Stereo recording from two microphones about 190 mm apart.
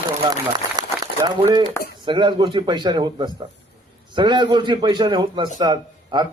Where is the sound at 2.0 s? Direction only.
25° right (ahead or behind).